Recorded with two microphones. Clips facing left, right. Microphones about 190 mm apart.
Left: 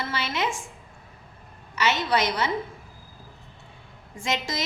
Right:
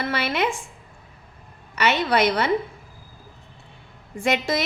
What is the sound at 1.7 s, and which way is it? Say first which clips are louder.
Speech: right 3 dB; 60° right (ahead or behind).